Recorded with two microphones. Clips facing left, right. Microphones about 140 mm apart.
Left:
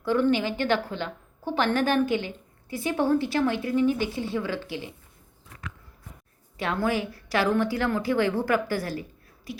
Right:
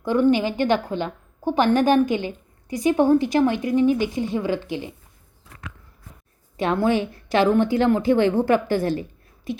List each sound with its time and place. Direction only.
0.0 s a woman's voice: 15° right (ahead or behind)
6.6 s a woman's voice: 25° right (ahead or behind)